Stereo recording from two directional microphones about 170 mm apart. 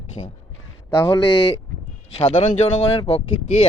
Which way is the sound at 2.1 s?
30° left (ahead or behind).